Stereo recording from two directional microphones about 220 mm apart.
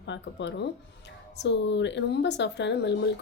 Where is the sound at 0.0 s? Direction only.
55° left (ahead or behind).